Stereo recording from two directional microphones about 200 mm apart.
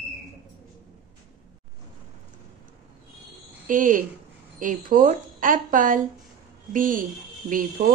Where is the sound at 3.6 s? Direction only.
40° right (ahead or behind).